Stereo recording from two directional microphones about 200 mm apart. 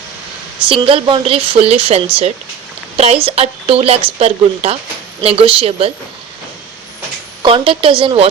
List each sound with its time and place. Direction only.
0.6 s speech: 25° right (ahead or behind)
7.4 s speech: 25° right (ahead or behind)